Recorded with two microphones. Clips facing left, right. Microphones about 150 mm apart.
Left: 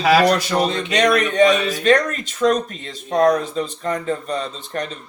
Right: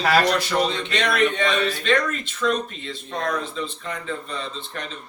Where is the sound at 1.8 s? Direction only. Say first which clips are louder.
Left 6 dB; 40° left (ahead or behind).